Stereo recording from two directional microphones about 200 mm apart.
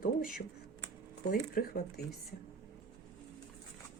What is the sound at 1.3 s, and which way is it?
Speech, 50° left (ahead or behind).